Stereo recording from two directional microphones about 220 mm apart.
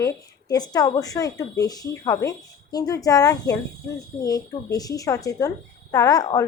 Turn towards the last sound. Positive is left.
turn(degrees=15)  # may be behind; listen again after turning